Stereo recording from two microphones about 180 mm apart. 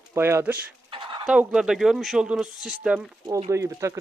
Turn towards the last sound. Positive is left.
turn(degrees=-15)  # may be behind; listen again after turning